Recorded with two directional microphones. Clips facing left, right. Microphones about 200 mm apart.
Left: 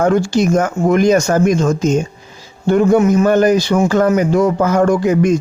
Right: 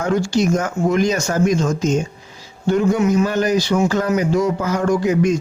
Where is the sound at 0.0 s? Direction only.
55° left (ahead or behind).